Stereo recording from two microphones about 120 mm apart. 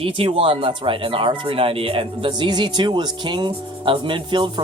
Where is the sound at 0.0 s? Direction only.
50° right (ahead or behind).